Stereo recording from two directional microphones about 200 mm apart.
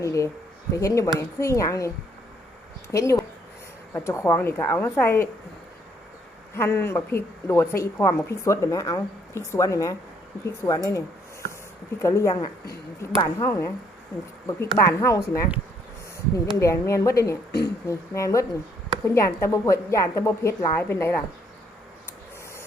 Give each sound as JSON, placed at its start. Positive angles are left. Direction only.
{"t": 0.0, "sound": "a woman's voice", "side_deg": 15}
{"t": 2.9, "sound": "a woman's voice", "side_deg": 15}
{"t": 6.5, "sound": "a woman's voice", "side_deg": 10}
{"t": 12.0, "sound": "a woman's voice", "side_deg": 15}
{"t": 14.8, "sound": "a woman's voice", "side_deg": 15}